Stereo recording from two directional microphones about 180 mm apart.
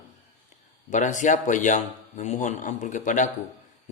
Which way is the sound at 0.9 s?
45° left (ahead or behind).